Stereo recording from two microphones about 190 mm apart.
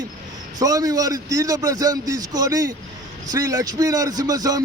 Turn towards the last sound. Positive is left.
turn(degrees=-20)  # may be behind; listen again after turning